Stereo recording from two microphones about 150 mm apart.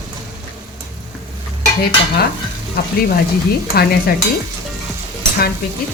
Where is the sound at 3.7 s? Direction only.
90° left.